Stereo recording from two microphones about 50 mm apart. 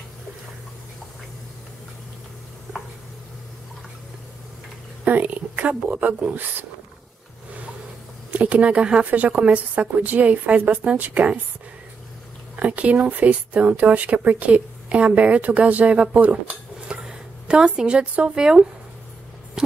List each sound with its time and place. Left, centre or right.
5.0 s speech: right
8.3 s speech: right
9.5 s speech: right
12.5 s speech: right
16.8 s speech: centre